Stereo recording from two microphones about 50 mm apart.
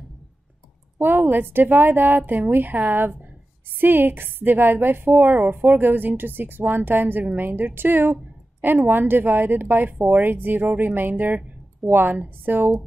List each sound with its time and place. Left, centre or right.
0.9 s a woman's voice: right
12.1 s a woman's voice: right